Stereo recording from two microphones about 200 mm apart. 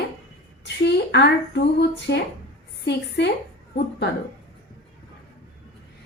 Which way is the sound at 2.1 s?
55° left (ahead or behind).